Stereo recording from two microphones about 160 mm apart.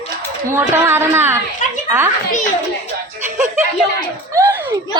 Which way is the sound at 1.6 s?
50° left (ahead or behind).